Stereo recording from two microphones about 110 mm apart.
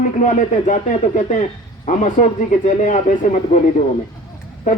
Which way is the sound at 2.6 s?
90° left.